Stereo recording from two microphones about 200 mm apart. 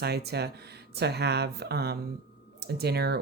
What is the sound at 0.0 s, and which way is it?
Speech, 55° right (ahead or behind).